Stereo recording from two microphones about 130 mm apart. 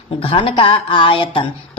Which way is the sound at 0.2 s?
45° left (ahead or behind).